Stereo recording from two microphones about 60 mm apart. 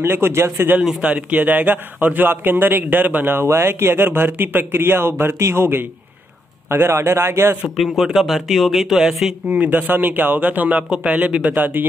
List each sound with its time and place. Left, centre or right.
0.0 s speech: right
1.0 s a man's voice: right
7.7 s speech: centre
9.5 s speech: right